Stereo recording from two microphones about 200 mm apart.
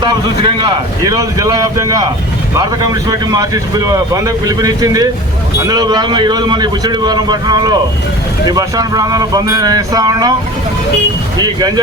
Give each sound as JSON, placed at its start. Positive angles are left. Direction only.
{"t": 0.0, "sound": "a man's voice", "side_deg": -25}